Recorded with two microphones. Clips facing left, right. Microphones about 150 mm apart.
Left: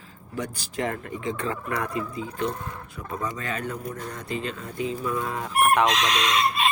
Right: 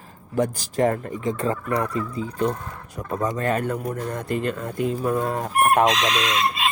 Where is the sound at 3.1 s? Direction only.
45° right (ahead or behind).